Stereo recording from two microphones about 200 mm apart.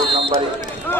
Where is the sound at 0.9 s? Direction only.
10° left (ahead or behind).